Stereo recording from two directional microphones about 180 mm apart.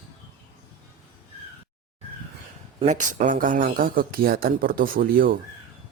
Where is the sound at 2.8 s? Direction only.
40° right (ahead or behind).